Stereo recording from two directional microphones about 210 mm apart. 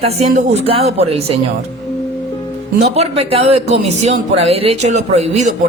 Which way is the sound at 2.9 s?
30° right (ahead or behind).